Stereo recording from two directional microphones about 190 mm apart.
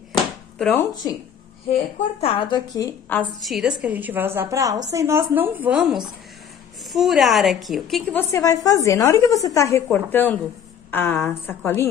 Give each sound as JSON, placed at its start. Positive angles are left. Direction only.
{"t": 0.1, "sound": "a sound", "side_deg": 0}
{"t": 1.7, "sound": "a woman's voice", "side_deg": 30}
{"t": 8.2, "sound": "a woman's voice", "side_deg": 15}